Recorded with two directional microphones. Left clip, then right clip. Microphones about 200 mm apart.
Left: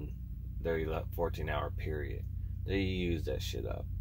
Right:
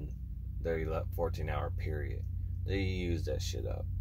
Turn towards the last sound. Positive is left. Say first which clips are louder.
# even
turn(degrees=5)  # may be behind; listen again after turning